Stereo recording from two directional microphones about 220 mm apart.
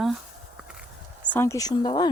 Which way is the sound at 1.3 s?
10° left (ahead or behind).